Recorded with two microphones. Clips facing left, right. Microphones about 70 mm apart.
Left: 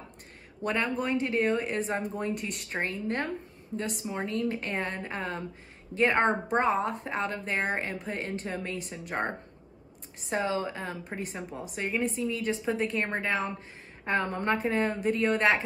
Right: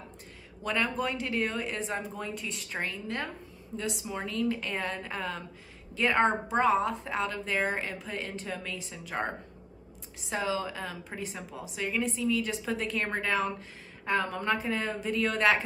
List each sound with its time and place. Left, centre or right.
0.7 s a woman's voice: left
2.3 s speech: left
2.7 s a woman's voice: left
4.1 s a woman's voice: left
15.1 s speech: left